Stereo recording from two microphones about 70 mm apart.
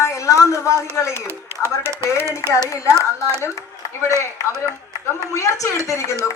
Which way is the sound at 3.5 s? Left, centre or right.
Left.